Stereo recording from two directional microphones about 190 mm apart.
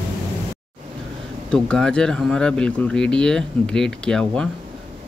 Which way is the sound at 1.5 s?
5° left (ahead or behind).